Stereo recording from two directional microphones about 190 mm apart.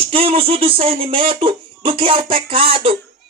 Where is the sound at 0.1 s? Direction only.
30° right (ahead or behind).